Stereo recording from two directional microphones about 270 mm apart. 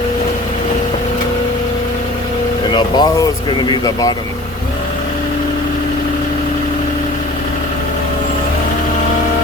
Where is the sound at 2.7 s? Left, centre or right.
Centre.